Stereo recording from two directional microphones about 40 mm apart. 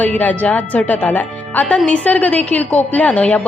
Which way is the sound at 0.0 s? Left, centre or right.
Left.